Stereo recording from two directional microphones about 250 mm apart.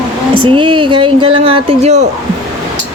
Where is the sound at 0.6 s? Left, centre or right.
Centre.